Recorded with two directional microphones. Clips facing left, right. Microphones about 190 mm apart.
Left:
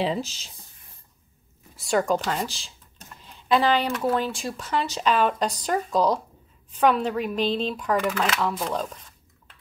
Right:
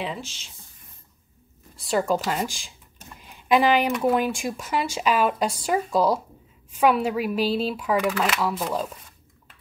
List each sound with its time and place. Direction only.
0.0 s speech: 35° left (ahead or behind)
1.8 s speech: centre (ahead or behind)